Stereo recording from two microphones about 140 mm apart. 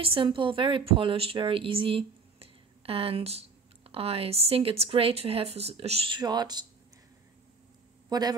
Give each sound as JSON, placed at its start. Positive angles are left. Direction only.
{"t": 0.0, "sound": "a woman's voice", "side_deg": -40}
{"t": 8.1, "sound": "a man's voice", "side_deg": -30}